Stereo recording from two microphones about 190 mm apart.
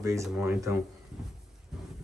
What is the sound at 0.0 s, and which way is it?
Speech, 15° right (ahead or behind).